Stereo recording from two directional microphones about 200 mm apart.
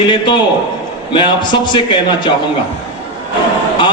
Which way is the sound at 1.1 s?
25° left (ahead or behind).